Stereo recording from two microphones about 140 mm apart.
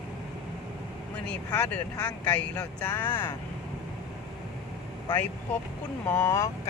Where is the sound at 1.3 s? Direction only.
10° left (ahead or behind).